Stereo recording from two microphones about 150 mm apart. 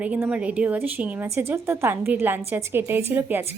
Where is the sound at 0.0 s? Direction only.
10° right (ahead or behind).